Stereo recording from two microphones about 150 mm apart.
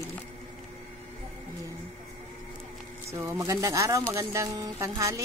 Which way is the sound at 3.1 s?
15° right (ahead or behind).